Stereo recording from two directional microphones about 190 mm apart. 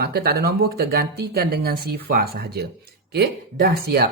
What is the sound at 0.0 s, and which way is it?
Speech, 55° right (ahead or behind).